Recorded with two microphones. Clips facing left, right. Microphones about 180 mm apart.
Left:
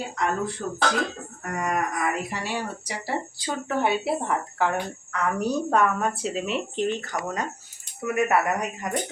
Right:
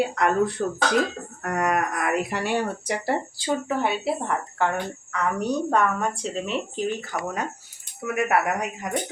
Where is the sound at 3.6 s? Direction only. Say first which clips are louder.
Left 5 dB; centre (ahead or behind).